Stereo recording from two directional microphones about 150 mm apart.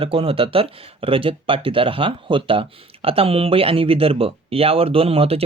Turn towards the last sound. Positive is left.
turn(degrees=-40)  # may be behind; listen again after turning